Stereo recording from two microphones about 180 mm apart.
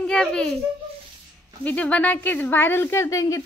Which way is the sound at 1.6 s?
5° left (ahead or behind).